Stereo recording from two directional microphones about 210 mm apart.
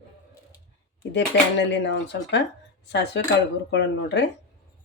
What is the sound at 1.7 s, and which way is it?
Speech, 55° left (ahead or behind).